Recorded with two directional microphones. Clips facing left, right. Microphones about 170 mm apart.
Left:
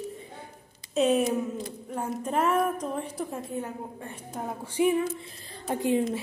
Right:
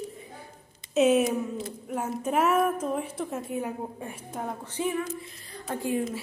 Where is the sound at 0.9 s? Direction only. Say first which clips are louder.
Right 2 dB; centre (ahead or behind).